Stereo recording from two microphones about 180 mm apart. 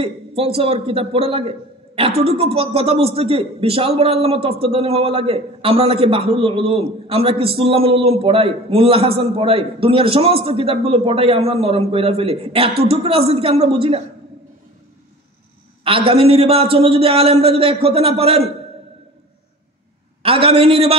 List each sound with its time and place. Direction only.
0.0 s a man's voice: 35° right (ahead or behind)
15.8 s a man's voice: 30° right (ahead or behind)
20.2 s a man's voice: 30° right (ahead or behind)